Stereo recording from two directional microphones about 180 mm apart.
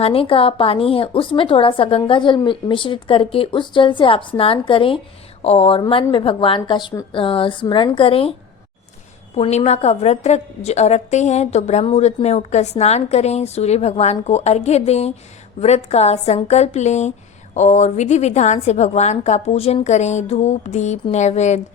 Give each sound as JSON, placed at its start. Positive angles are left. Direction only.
{"t": 0.0, "sound": "a woman's voice", "side_deg": 30}